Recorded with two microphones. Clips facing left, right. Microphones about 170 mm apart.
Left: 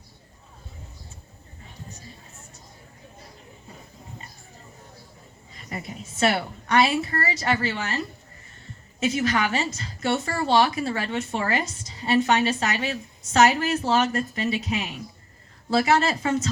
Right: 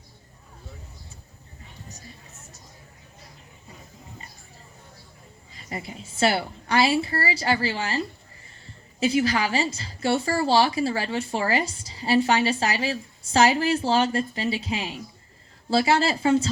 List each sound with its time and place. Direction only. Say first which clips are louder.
5.6 s a woman's voice: even; 30° right (ahead or behind)